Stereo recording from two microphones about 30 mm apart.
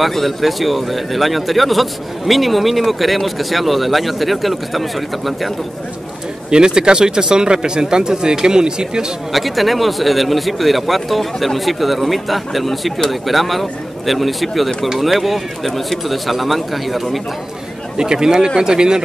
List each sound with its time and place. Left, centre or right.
0.0 s speech: centre
6.5 s speech: right
9.3 s speech: centre
17.9 s speech: right